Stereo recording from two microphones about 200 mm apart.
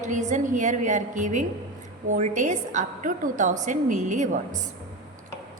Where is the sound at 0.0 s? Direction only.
35° right (ahead or behind).